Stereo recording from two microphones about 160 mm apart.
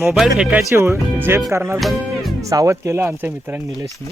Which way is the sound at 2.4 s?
20° right (ahead or behind).